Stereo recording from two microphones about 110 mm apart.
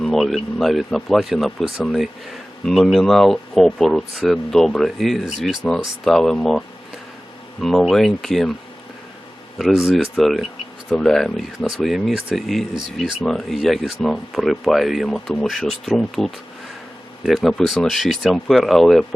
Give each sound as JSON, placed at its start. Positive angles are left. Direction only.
{"t": 0.0, "sound": "speech", "side_deg": 0}
{"t": 7.6, "sound": "speech", "side_deg": 5}
{"t": 9.7, "sound": "speech", "side_deg": 0}